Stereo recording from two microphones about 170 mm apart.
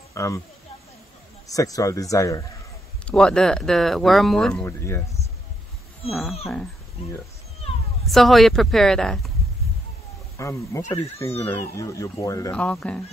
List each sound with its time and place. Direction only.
0.1 s speech: 20° left (ahead or behind)
1.5 s a man's voice: 20° left (ahead or behind)
3.1 s speech: 5° left (ahead or behind)
6.0 s speech: centre (ahead or behind)
8.0 s speech: centre (ahead or behind)
10.3 s speech: 15° left (ahead or behind)
12.5 s speech: 5° left (ahead or behind)